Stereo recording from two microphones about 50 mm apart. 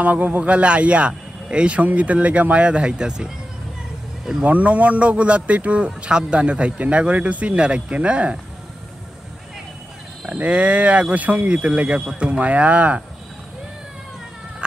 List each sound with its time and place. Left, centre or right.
0.0 s speech: right; by 3.3 s centre
4.5 s speech: right
10.2 s speech: right